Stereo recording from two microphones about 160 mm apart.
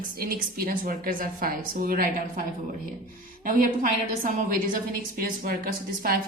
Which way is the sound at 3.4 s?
55° right (ahead or behind).